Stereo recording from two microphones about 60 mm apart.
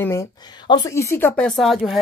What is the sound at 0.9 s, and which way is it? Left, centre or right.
Speech, left.